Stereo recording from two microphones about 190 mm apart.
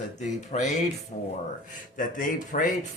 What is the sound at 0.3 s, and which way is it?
Speech, 40° left (ahead or behind).